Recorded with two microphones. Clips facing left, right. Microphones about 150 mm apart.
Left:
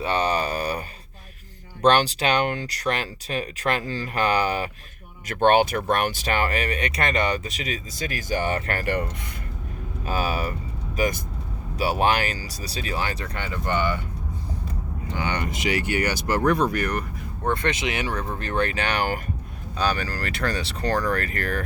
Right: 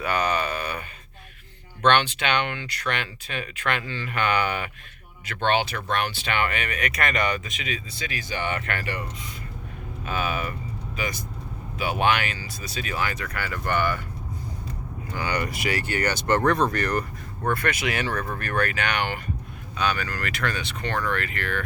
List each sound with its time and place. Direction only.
0.0 s a sound: 30° left (ahead or behind)
1.8 s speech: 35° left (ahead or behind)
5.2 s speech: 45° left (ahead or behind)
10.1 s speech: 35° left (ahead or behind); by 14.0 s 20° left (ahead or behind)
15.1 s speech: 20° left (ahead or behind); by 17.0 s 5° left (ahead or behind)
17.4 s speech: 20° left (ahead or behind); by 21.6 s 40° left (ahead or behind)